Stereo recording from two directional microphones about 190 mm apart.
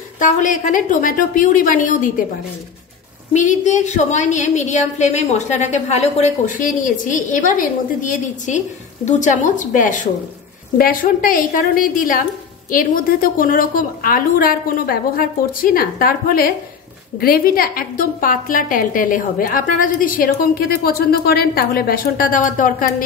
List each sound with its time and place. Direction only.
0.2 s a woman's voice: 45° left (ahead or behind)
3.3 s a woman's voice: 40° left (ahead or behind)